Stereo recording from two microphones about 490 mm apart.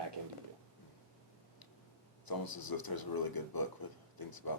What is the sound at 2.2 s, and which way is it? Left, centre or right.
Speech, left.